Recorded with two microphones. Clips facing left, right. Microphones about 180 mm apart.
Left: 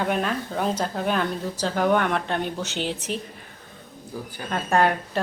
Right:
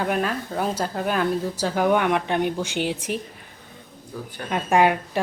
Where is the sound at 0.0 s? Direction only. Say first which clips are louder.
Right 1 dB; 5° right (ahead or behind).